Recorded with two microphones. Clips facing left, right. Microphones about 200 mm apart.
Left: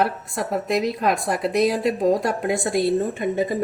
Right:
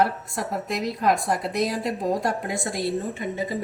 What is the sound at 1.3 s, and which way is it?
Speech, 70° left (ahead or behind).